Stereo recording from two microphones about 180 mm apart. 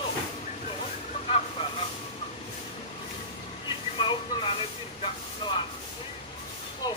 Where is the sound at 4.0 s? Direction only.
30° left (ahead or behind).